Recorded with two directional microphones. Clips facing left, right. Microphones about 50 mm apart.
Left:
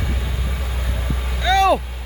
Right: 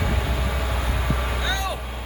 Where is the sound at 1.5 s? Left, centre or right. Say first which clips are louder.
Left 15 dB; left.